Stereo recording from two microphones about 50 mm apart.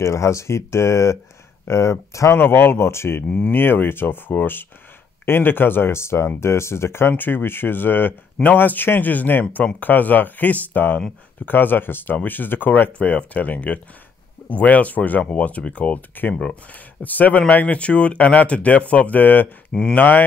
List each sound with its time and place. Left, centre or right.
0.0 s speech: left
2.3 s speech: left
3.3 s speech: left
3.5 s speech: left